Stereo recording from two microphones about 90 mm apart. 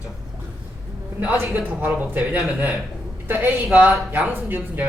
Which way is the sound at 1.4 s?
25° right (ahead or behind).